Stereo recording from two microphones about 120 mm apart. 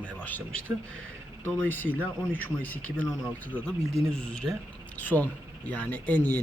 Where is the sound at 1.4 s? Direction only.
15° left (ahead or behind).